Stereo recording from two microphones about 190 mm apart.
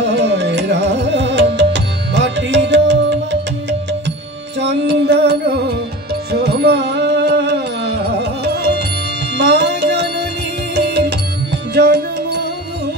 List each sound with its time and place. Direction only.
0.0 s music: 65° right (ahead or behind)
4.6 s music: 65° right (ahead or behind)